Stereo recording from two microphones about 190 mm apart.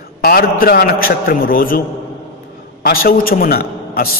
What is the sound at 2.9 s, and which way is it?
A man's voice, 50° left (ahead or behind).